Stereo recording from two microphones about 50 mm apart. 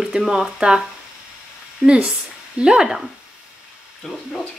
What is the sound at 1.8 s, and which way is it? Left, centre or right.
A woman's voice, centre.